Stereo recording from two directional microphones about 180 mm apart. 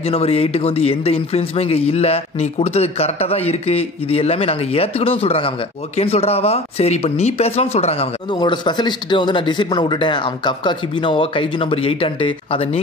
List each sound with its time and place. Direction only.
0.0 s speech: 35° left (ahead or behind)